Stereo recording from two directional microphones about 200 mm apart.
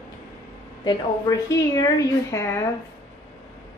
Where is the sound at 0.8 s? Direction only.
15° left (ahead or behind).